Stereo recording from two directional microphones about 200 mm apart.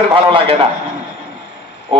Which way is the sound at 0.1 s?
25° right (ahead or behind).